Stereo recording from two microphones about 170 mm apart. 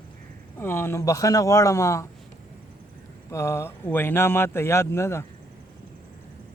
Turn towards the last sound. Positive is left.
turn(degrees=15)  # may be behind; listen again after turning